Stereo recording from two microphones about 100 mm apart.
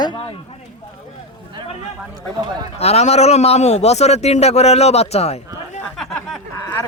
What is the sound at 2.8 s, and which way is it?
A man's voice, 90° left.